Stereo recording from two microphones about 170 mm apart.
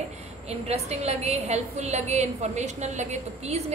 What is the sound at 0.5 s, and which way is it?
A woman's voice, 40° right (ahead or behind).